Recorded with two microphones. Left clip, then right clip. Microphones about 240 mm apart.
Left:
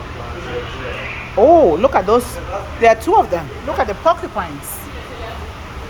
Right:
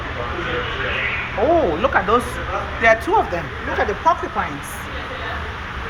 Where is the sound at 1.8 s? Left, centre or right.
Left.